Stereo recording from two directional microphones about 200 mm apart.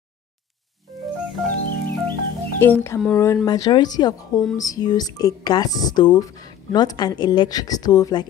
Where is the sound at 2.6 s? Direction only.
10° left (ahead or behind).